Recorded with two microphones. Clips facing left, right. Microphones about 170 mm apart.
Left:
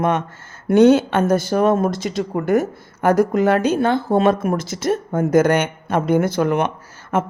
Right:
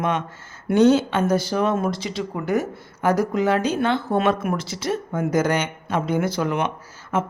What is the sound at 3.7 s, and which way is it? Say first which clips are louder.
Speech: left 4 dB; 40° left (ahead or behind).